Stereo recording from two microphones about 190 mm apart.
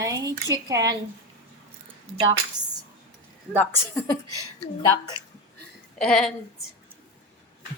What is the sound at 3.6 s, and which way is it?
Speech, 10° left (ahead or behind).